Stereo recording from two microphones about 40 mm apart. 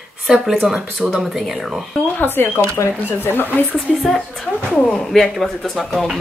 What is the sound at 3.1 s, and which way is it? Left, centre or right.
Speech, left.